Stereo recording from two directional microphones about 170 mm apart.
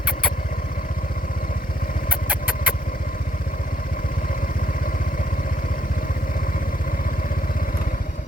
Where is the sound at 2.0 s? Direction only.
10° right (ahead or behind).